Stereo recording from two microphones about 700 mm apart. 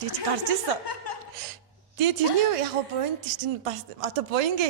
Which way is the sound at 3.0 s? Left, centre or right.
Right.